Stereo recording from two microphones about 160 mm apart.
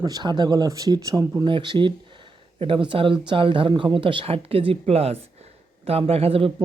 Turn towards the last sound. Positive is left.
turn(degrees=-35)  # may be behind; listen again after turning